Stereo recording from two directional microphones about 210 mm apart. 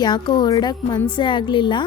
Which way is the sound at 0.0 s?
20° left (ahead or behind).